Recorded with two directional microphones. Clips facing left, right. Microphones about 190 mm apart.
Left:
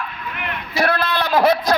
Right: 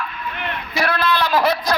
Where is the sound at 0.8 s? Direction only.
55° left (ahead or behind).